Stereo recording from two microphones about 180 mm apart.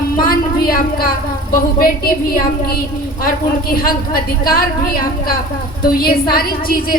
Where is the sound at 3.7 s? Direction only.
55° left (ahead or behind).